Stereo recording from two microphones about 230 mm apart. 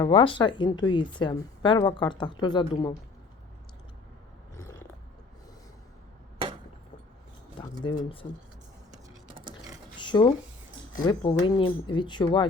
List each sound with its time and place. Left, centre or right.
0.0 s speech: left
4.5 s a sound: centre
7.6 s speech: centre
10.0 s speech: centre